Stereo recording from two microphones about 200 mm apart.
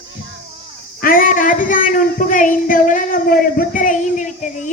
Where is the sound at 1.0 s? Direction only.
45° left (ahead or behind).